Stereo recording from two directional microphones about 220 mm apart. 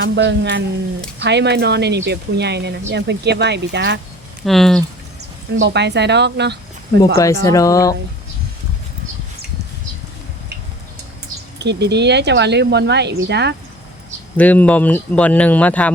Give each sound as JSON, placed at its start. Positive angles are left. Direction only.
{"t": 0.0, "sound": "speech", "side_deg": -55}
{"t": 4.4, "sound": "speech", "side_deg": 0}
{"t": 5.5, "sound": "speech", "side_deg": -50}
{"t": 7.4, "sound": "speech", "side_deg": 15}
{"t": 11.6, "sound": "speech", "side_deg": -50}
{"t": 14.3, "sound": "speech", "side_deg": 5}